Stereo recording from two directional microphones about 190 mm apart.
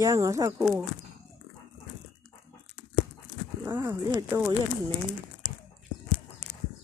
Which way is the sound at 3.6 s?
15° right (ahead or behind).